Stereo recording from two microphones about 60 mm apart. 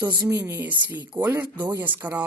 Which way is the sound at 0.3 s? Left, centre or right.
Right.